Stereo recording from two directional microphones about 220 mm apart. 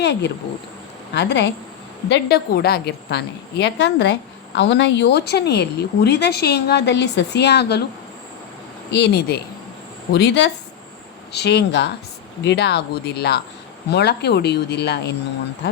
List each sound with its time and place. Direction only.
0.0 s a woman's voice: 50° left (ahead or behind)
8.9 s a woman's voice: 50° left (ahead or behind)